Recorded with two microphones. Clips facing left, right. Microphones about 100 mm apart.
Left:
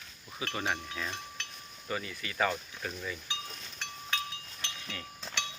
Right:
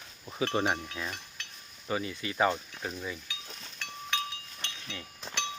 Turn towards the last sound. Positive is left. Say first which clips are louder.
# even
turn(degrees=-15)  # may be behind; listen again after turning